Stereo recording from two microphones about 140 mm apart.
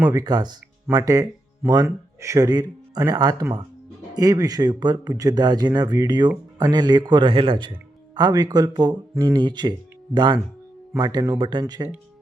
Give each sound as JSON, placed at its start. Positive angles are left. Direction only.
{"t": 0.0, "sound": "speech", "side_deg": -25}